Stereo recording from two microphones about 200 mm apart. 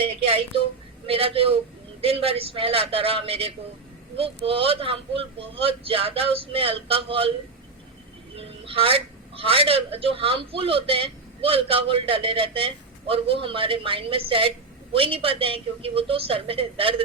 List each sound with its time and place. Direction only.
0.0 s a woman's voice: 25° right (ahead or behind)
8.4 s a man's voice: 30° right (ahead or behind)